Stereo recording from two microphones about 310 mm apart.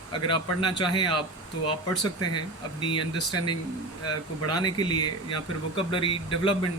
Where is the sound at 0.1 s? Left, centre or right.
Centre.